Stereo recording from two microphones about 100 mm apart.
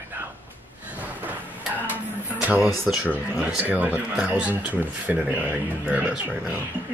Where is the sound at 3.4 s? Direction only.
15° right (ahead or behind).